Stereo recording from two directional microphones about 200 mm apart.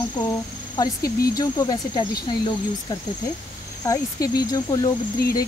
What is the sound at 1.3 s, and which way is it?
Speech, 20° left (ahead or behind).